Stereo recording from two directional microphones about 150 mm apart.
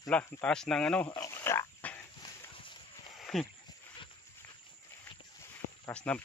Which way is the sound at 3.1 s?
Centre (ahead or behind).